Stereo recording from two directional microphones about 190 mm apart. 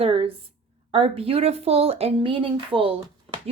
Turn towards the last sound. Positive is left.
turn(degrees=-25)  # may be behind; listen again after turning